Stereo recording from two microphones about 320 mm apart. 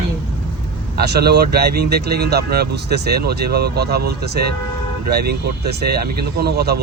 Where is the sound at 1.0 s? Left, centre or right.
Right.